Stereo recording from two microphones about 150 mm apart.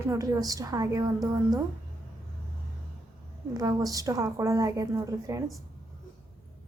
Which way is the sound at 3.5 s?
25° right (ahead or behind).